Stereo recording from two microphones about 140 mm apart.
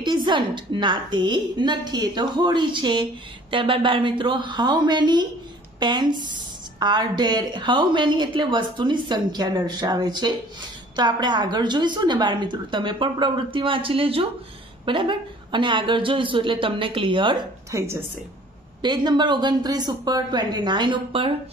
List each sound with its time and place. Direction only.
0.0 s a woman's voice: 30° right (ahead or behind)
17.6 s speech: 20° right (ahead or behind)
18.8 s a woman's voice: 30° right (ahead or behind)